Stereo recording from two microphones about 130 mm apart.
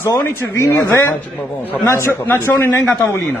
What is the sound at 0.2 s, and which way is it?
A man's voice, 20° left (ahead or behind).